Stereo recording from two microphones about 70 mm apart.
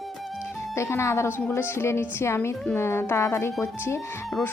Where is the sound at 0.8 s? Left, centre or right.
Left.